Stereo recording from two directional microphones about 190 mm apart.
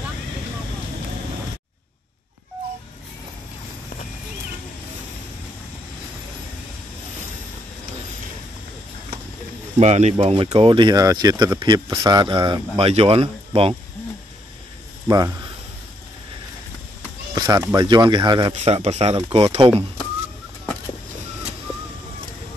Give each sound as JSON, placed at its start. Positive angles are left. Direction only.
{"t": 9.8, "sound": "speech", "side_deg": -35}
{"t": 15.0, "sound": "speech", "side_deg": -20}
{"t": 17.3, "sound": "speech", "side_deg": -20}
{"t": 18.5, "sound": "speech", "side_deg": -35}